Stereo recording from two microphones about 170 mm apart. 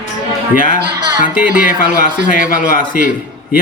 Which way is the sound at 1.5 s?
10° right (ahead or behind).